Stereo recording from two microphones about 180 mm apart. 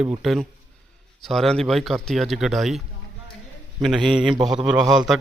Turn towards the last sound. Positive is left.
turn(degrees=0)  # may be behind; listen again after turning